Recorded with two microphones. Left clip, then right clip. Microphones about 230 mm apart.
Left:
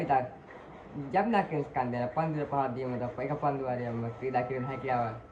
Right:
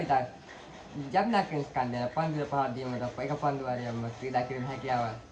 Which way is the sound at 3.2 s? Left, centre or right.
Right.